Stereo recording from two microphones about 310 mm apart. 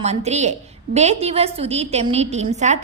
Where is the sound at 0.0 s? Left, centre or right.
Right.